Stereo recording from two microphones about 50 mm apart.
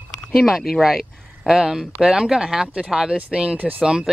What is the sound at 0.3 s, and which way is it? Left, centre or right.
Speech, centre.